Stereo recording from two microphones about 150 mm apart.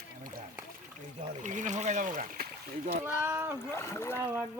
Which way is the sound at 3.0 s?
15° right (ahead or behind).